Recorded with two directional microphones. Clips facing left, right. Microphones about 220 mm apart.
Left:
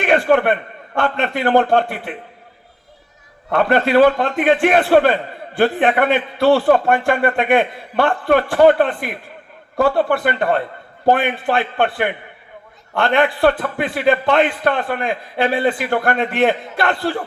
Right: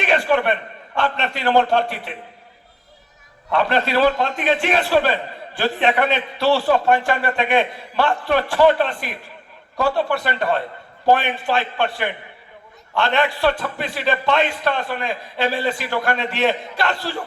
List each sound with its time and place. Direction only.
0.0 s a man's voice: 50° left (ahead or behind)
3.5 s a man's voice: 50° left (ahead or behind)